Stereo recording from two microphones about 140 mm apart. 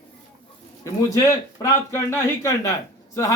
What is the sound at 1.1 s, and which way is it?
A man's voice, 20° left (ahead or behind).